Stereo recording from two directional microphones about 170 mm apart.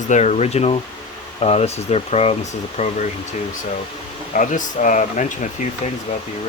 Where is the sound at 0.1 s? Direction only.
40° left (ahead or behind).